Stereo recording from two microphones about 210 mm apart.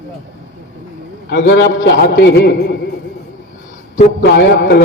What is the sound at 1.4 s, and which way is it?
A man's voice, 55° left (ahead or behind).